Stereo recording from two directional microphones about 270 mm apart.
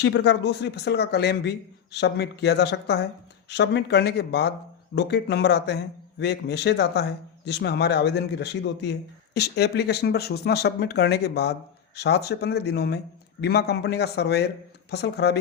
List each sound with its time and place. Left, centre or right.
0.0 s a man's voice: left